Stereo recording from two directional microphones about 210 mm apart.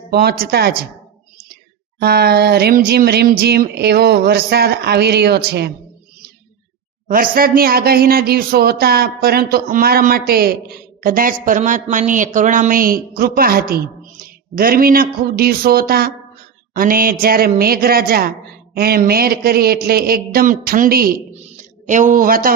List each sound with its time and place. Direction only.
0.1 s a man's voice: 50° right (ahead or behind)
2.0 s a man's voice: 50° right (ahead or behind)
7.1 s a man's voice: 45° right (ahead or behind)
21.3 s a sound: 35° right (ahead or behind)